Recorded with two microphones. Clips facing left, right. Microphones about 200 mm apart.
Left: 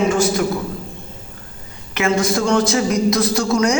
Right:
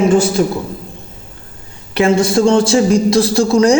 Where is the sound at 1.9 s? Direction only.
30° right (ahead or behind).